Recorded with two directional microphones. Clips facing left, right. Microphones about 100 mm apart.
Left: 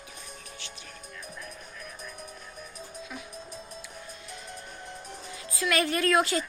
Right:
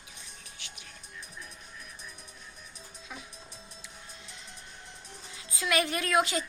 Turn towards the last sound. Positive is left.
turn(degrees=-15)  # may be behind; listen again after turning